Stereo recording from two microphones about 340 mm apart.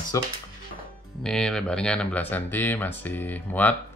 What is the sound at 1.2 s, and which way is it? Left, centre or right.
Speech, centre.